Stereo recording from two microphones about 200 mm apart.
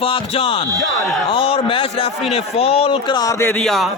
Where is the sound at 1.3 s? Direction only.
25° left (ahead or behind).